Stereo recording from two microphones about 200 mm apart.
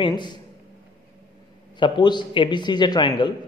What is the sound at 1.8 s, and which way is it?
A man's voice, 25° left (ahead or behind).